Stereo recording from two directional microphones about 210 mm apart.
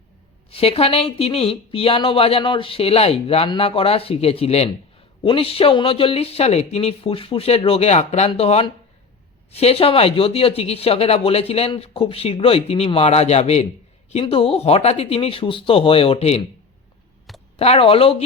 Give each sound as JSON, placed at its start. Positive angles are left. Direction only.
{"t": 0.5, "sound": "speech", "side_deg": 25}
{"t": 17.6, "sound": "speech", "side_deg": 30}